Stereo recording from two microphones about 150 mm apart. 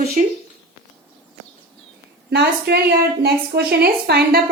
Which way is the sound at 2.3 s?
90° right.